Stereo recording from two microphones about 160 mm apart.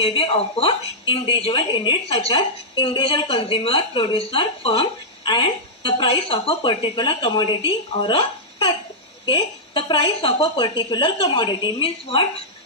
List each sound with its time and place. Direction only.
0.0 s a woman's voice: 35° left (ahead or behind)